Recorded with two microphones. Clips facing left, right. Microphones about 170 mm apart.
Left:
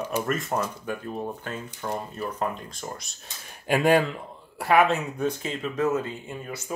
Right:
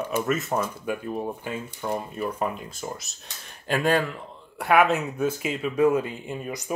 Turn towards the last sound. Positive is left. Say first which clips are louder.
# right 3 dB
turn(degrees=-15)  # may be behind; listen again after turning